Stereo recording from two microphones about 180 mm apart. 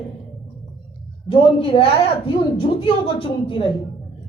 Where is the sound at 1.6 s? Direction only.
30° left (ahead or behind).